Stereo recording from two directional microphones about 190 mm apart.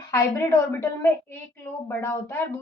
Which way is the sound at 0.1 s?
15° left (ahead or behind).